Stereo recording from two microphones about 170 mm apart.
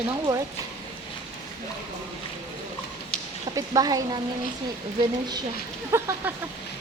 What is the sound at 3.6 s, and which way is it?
Speech, 20° right (ahead or behind).